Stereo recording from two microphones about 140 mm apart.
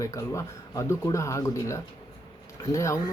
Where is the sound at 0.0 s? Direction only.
20° left (ahead or behind).